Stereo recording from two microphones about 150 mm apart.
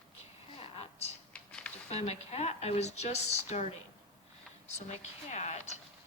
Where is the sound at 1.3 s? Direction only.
5° left (ahead or behind).